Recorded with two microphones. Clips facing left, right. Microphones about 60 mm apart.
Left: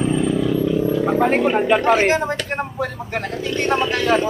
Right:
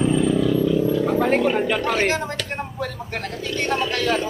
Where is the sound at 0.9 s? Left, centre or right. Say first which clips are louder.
Left 2 dB; left.